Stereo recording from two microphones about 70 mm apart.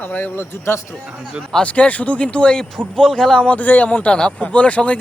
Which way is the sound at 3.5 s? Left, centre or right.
Left.